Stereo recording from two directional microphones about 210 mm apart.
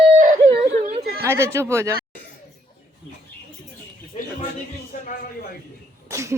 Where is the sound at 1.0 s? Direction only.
45° right (ahead or behind).